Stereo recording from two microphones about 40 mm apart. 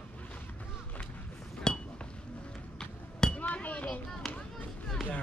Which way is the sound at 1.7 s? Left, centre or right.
Centre.